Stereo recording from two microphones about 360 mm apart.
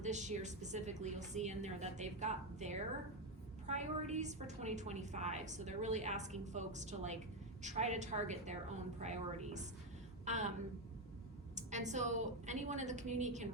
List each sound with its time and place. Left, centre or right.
0.0 s a woman's voice: centre
11.5 s a woman's voice: centre